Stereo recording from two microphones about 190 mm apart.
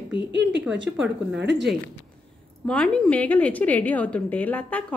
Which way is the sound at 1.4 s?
65° right (ahead or behind).